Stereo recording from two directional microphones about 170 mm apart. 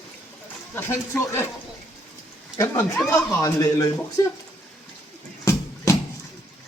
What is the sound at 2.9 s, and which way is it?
Speech, 15° left (ahead or behind).